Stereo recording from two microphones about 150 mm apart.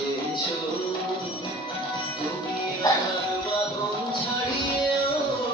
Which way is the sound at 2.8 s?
25° left (ahead or behind).